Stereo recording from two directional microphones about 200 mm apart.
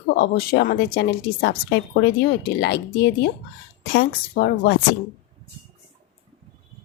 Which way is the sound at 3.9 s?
50° left (ahead or behind).